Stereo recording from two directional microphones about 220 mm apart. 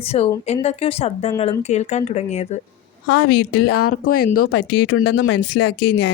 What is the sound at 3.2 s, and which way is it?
Speech, 90° left.